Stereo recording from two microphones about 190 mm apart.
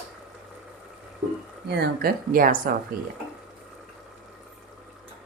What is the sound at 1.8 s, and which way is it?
Speech, 50° right (ahead or behind).